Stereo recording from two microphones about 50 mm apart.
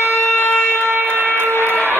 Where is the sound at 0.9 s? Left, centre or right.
Right.